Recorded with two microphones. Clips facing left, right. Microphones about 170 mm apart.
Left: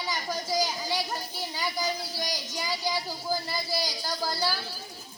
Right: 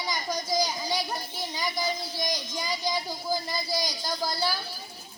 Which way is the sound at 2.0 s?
15° right (ahead or behind).